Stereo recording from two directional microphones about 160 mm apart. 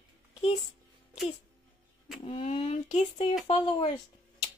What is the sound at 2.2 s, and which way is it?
A child's voice, 35° left (ahead or behind).